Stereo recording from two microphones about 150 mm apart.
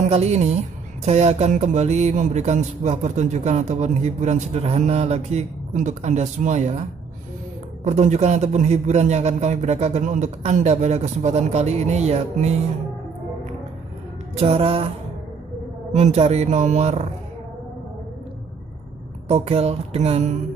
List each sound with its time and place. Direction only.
0.0 s speech: 45° right (ahead or behind)
14.3 s music: 40° right (ahead or behind)
15.9 s speech: 50° right (ahead or behind)
19.2 s speech: 45° right (ahead or behind)